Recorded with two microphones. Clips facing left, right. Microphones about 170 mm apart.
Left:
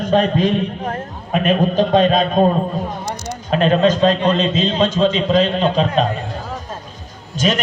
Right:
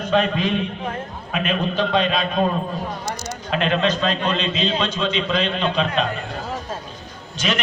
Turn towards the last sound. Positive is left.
turn(degrees=40)  # may be behind; listen again after turning